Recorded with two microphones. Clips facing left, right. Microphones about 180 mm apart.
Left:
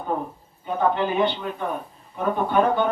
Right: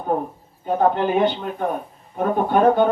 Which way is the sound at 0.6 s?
45° right (ahead or behind).